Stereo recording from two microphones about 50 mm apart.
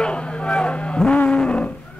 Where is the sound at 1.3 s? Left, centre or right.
Centre.